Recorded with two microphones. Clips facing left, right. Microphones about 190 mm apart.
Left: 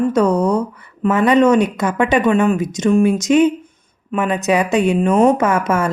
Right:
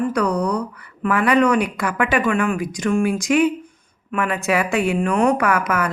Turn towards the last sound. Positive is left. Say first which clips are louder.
# left 4 dB
turn(degrees=25)  # may be behind; listen again after turning